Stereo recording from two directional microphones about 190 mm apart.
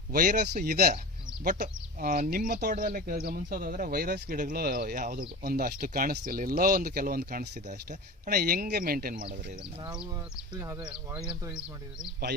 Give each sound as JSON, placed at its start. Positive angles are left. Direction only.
{"t": 0.1, "sound": "speech", "side_deg": -50}
{"t": 1.5, "sound": "speech", "side_deg": -40}
{"t": 10.5, "sound": "speech", "side_deg": -15}
{"t": 10.8, "sound": "speech", "side_deg": -5}